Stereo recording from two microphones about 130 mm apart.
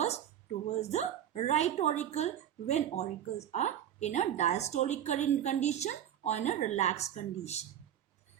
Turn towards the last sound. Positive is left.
turn(degrees=55)  # may be behind; listen again after turning